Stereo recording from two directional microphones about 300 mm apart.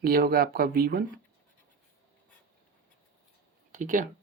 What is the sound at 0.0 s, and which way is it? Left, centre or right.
Speech, right.